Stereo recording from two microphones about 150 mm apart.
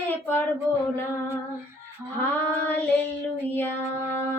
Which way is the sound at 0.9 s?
15° left (ahead or behind).